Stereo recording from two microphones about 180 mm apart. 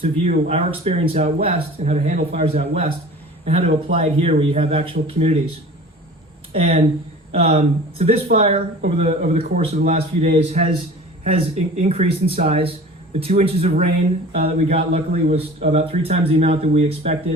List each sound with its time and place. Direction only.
0.0 s a man's voice: 35° right (ahead or behind)
6.5 s a man's voice: 35° right (ahead or behind)